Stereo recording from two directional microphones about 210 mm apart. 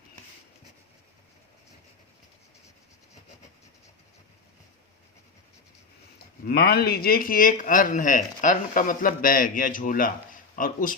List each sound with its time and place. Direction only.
6.4 s speech: 45° left (ahead or behind)